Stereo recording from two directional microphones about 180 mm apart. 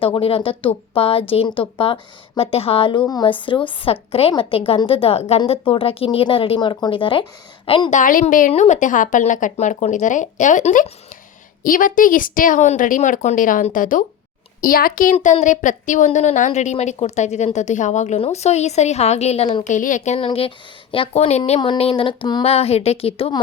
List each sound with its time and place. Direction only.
0.0 s a woman's voice: 30° left (ahead or behind)
7.9 s a woman's voice: 45° left (ahead or behind)
15.1 s a woman's voice: 40° left (ahead or behind)
19.6 s a woman's voice: 45° left (ahead or behind)
20.1 s a woman's voice: 30° left (ahead or behind)